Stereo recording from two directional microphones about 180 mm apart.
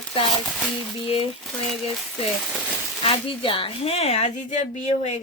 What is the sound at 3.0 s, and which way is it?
Speech, 30° left (ahead or behind).